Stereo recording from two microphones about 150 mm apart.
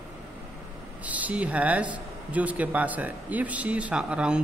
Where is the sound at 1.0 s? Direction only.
10° right (ahead or behind).